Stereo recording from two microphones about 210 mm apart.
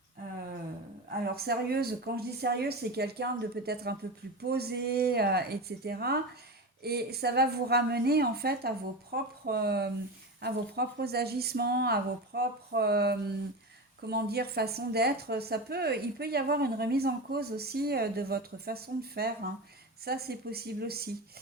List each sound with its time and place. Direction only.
1.2 s a woman's voice: 50° right (ahead or behind)